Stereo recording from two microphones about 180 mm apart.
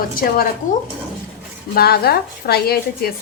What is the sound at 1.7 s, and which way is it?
A woman's voice, 60° left (ahead or behind).